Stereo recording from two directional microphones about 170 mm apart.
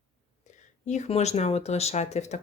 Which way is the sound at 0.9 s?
40° left (ahead or behind).